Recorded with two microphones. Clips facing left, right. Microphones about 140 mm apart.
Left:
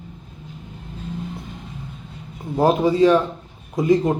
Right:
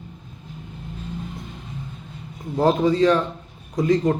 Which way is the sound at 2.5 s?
15° left (ahead or behind).